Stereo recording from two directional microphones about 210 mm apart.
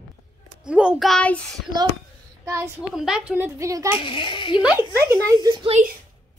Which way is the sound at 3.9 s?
25° left (ahead or behind).